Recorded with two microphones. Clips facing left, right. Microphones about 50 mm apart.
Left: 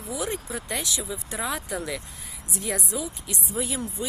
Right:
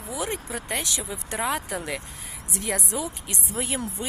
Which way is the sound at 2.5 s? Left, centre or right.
Right.